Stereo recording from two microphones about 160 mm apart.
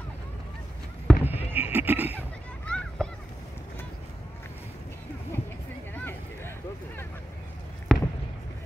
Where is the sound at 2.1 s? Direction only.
5° left (ahead or behind).